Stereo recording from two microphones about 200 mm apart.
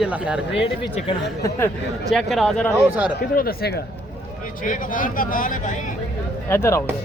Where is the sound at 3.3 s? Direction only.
45° left (ahead or behind).